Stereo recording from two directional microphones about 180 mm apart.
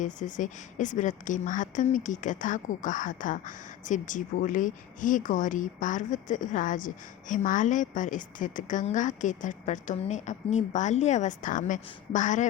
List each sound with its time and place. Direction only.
0.0 s speech: 45° left (ahead or behind)